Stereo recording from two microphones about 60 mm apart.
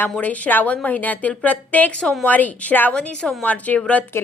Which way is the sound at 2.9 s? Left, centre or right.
Centre.